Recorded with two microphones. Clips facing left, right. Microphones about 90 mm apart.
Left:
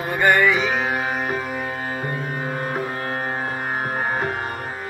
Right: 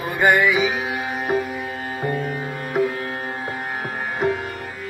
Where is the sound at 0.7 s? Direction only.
50° left (ahead or behind).